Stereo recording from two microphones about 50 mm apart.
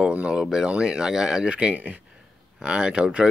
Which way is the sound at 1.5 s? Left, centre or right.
Right.